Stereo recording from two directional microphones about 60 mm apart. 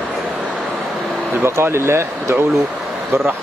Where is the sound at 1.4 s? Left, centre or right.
Right.